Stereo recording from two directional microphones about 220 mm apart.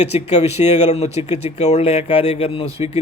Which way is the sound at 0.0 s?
30° left (ahead or behind).